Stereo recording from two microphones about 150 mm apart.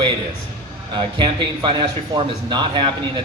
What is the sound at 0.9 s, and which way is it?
A man's voice, 30° right (ahead or behind).